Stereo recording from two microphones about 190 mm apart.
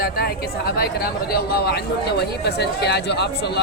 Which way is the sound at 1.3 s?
55° left (ahead or behind).